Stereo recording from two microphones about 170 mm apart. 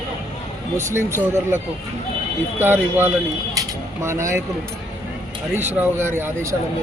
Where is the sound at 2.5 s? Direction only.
10° right (ahead or behind).